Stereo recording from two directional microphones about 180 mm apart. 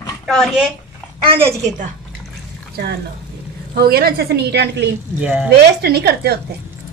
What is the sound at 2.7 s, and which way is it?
A woman's voice, 65° right (ahead or behind).